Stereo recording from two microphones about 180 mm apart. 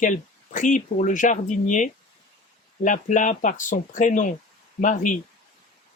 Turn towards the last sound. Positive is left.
turn(degrees=45)  # may be behind; listen again after turning